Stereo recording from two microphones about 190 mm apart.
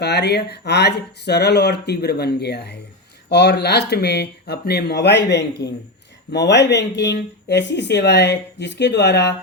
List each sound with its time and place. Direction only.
0.0 s speech: 60° left (ahead or behind)